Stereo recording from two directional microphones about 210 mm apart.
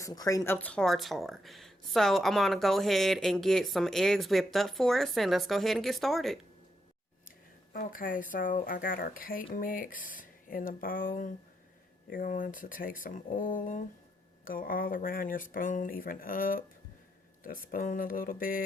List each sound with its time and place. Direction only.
0.0 s speech: 15° left (ahead or behind); by 6.4 s centre (ahead or behind)
7.3 s speech: 40° left (ahead or behind)